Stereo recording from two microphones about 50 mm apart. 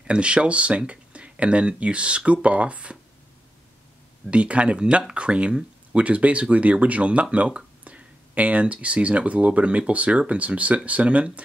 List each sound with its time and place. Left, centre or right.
0.0 s speech: right
4.3 s speech: right